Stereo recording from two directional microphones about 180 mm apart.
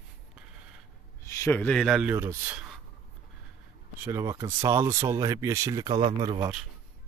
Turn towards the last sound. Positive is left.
turn(degrees=-30)  # may be behind; listen again after turning